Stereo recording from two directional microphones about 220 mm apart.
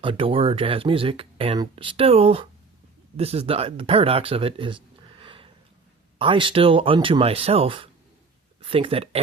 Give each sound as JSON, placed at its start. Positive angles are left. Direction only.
{"t": 0.0, "sound": "speech", "side_deg": -25}